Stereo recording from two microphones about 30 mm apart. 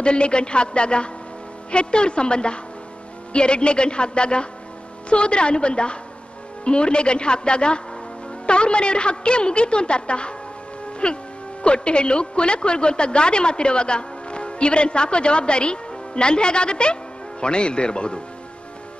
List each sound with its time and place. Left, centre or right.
0.0 s a woman's voice: left